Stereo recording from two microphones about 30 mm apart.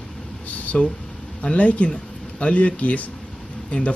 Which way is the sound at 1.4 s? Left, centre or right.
Left.